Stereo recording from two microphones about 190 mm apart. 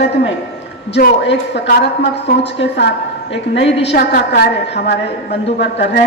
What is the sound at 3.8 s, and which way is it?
A woman's voice, 55° left (ahead or behind).